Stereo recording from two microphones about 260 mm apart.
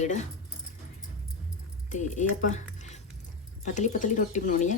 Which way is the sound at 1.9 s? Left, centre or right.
Left.